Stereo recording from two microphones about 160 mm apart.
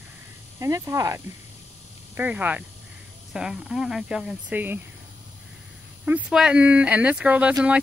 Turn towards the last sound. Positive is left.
turn(degrees=-10)  # may be behind; listen again after turning